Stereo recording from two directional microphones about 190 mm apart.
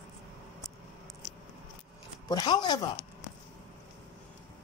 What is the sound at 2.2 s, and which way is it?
Speech, 20° left (ahead or behind).